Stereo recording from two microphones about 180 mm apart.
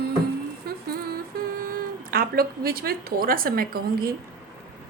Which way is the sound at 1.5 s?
55° right (ahead or behind).